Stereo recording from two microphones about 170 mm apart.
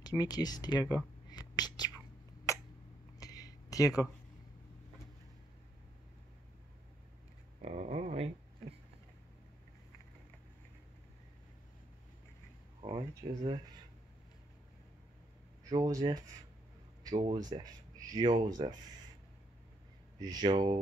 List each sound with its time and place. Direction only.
0.0 s whispering: 25° left (ahead or behind)
2.5 s a sound: 20° left (ahead or behind)
7.6 s a sound: 40° right (ahead or behind)
12.8 s speech: 25° right (ahead or behind)
15.6 s speech: 20° right (ahead or behind)
20.2 s speech: 25° right (ahead or behind)